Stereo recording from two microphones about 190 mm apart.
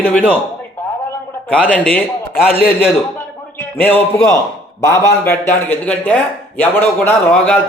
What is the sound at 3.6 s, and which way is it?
Speech, 10° left (ahead or behind).